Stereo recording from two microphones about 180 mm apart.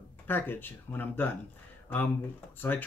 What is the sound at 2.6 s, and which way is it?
Speech, 10° left (ahead or behind).